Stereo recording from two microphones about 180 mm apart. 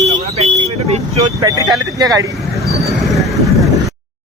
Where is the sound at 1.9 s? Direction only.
20° right (ahead or behind).